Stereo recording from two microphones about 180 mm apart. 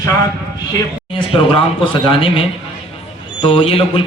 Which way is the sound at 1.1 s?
30° left (ahead or behind).